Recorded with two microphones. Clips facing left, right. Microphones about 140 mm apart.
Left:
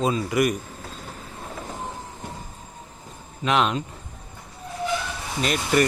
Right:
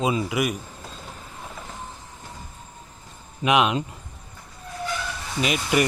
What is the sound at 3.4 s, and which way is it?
Speech, 10° right (ahead or behind).